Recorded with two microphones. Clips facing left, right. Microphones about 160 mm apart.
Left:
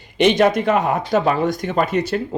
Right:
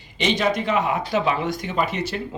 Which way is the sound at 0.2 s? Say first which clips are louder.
Left 7 dB; 55° left (ahead or behind).